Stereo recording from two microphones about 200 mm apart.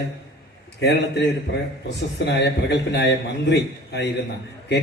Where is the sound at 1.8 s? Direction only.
60° left (ahead or behind).